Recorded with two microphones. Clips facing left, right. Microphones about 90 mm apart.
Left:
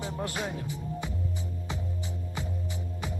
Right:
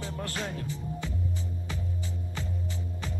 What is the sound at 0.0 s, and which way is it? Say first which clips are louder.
Music: left 2 dB; 15° left (ahead or behind).